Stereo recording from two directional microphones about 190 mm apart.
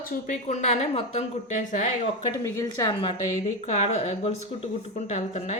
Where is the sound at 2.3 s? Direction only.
20° left (ahead or behind).